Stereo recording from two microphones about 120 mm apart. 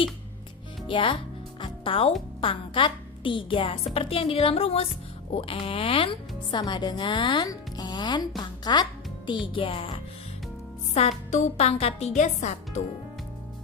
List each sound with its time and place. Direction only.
0.9 s speech: 45° left (ahead or behind)
1.6 s music: 45° left (ahead or behind)
2.4 s a woman's voice: 45° left (ahead or behind)
11.3 s speech: 75° left (ahead or behind)